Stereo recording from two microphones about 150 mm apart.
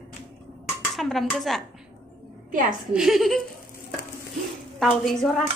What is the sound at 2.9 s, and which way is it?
Speech, centre (ahead or behind).